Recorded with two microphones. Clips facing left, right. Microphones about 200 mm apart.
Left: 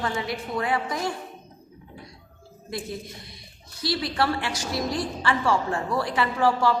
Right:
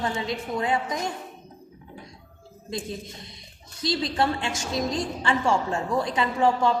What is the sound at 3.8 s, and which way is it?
A woman's voice, 20° right (ahead or behind).